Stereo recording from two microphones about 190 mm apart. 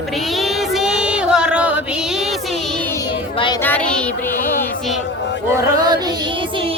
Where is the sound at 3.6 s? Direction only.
5° left (ahead or behind).